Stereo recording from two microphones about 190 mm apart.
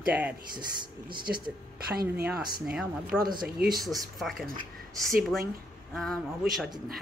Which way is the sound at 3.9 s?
Centre (ahead or behind).